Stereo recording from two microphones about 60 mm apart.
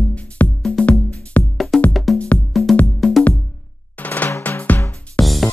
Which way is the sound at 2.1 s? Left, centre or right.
Left.